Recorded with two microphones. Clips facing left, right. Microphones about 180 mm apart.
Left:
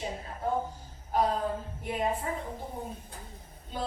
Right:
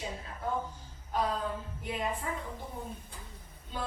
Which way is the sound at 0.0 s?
30° left (ahead or behind).